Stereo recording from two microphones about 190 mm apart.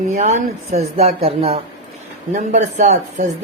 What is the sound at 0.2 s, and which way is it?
Speech, 35° right (ahead or behind).